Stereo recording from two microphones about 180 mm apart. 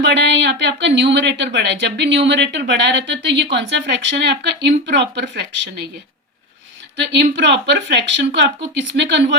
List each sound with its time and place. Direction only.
0.0 s speech: 80° right
6.9 s speech: 75° right (ahead or behind)